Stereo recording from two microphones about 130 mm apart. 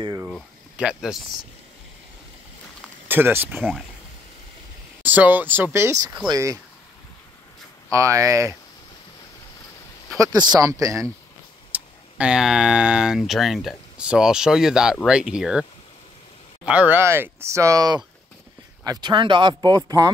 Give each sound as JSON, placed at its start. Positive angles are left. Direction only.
{"t": 0.3, "sound": "speech", "side_deg": -5}
{"t": 3.1, "sound": "speech", "side_deg": -15}
{"t": 5.0, "sound": "speech", "side_deg": -15}
{"t": 7.9, "sound": "speech", "side_deg": -25}
{"t": 10.1, "sound": "speech", "side_deg": -25}
{"t": 11.7, "sound": "speech", "side_deg": -10}
{"t": 16.6, "sound": "speech", "side_deg": -10}